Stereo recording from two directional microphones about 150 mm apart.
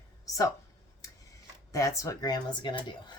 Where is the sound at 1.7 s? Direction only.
20° left (ahead or behind).